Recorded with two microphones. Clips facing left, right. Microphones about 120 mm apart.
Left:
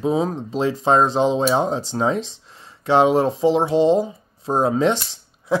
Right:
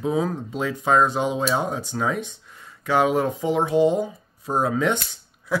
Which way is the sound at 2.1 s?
90° left.